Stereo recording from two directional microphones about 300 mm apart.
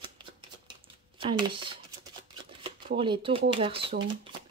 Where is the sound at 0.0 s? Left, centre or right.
Centre.